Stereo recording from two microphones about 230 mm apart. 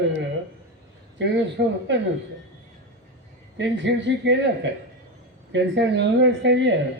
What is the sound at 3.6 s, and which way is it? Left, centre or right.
Speech, right.